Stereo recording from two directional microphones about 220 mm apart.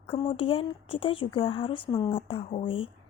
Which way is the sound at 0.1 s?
25° left (ahead or behind).